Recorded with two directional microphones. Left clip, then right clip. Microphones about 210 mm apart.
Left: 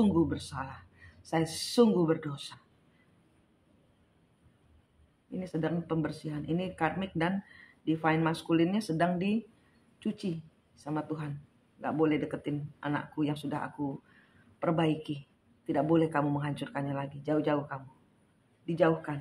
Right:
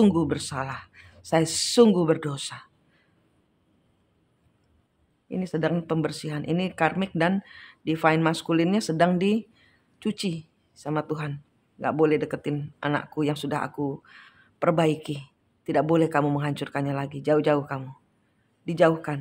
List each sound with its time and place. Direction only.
0.0 s speech: 45° right (ahead or behind)
5.4 s speech: 45° right (ahead or behind)